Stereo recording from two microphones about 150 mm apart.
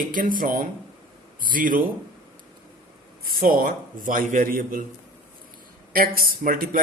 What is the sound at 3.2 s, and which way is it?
A man's voice, 70° right (ahead or behind).